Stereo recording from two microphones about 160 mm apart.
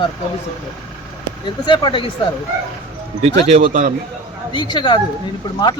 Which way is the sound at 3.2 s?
45° right (ahead or behind).